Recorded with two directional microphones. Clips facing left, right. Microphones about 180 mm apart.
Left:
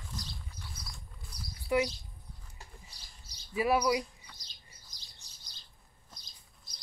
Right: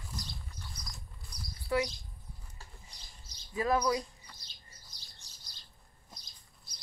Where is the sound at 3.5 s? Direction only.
10° left (ahead or behind).